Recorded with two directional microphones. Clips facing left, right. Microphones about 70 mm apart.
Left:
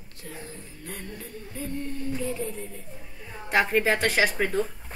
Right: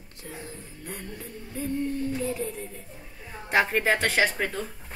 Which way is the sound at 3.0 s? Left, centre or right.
Centre.